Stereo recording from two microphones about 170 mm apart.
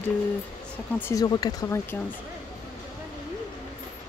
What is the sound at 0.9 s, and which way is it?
Speech, 15° left (ahead or behind).